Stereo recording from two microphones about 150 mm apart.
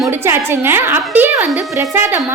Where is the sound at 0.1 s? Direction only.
15° right (ahead or behind).